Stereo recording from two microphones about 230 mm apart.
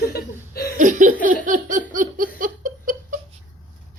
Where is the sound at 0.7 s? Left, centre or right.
Right.